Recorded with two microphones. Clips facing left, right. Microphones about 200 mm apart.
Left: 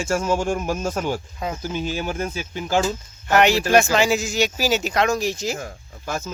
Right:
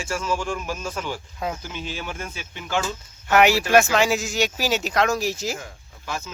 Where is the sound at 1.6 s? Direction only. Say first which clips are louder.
Left 7 dB; 45° left (ahead or behind).